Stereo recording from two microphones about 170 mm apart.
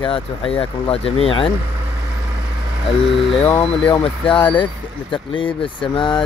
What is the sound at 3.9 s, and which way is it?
Speech, 30° left (ahead or behind).